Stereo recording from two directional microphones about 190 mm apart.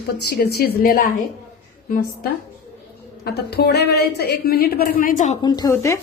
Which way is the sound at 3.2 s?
55° left (ahead or behind).